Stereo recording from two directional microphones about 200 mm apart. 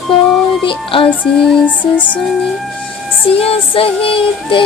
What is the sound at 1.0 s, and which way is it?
Music, 5° left (ahead or behind).